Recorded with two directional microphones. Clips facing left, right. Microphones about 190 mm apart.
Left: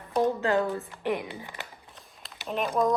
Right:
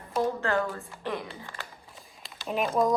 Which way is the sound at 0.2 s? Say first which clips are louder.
Left 3 dB; 15° left (ahead or behind).